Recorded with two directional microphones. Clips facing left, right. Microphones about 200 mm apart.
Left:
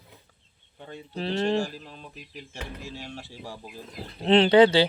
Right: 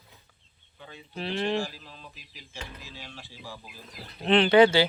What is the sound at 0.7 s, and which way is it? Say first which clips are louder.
Speech: left 6 dB; 55° left (ahead or behind).